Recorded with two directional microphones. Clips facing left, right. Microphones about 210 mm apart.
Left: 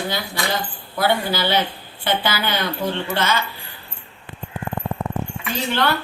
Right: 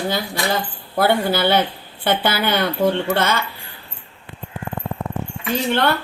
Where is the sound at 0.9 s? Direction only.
55° right (ahead or behind).